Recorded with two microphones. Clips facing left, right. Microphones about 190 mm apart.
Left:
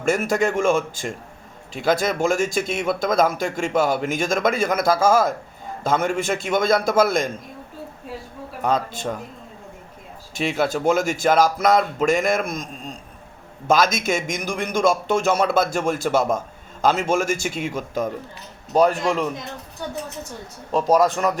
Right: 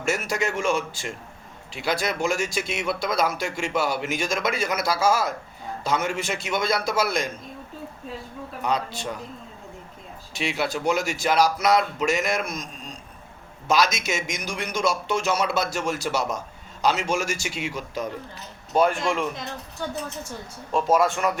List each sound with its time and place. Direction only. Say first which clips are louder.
0.1 s speech: left 6 dB; 50° left (ahead or behind)
8.6 s speech: left 4 dB; 45° left (ahead or behind)
10.4 s speech: left 5 dB; 50° left (ahead or behind)
13.7 s speech: left 4 dB; 50° left (ahead or behind)
20.7 s speech: left 3 dB; 40° left (ahead or behind)